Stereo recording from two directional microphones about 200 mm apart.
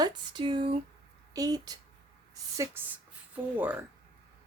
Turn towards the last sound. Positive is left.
turn(degrees=-10)  # may be behind; listen again after turning